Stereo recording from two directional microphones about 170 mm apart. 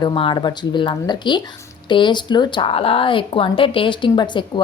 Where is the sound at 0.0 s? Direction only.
30° left (ahead or behind).